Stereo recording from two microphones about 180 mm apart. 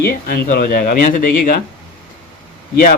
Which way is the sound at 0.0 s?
55° left (ahead or behind).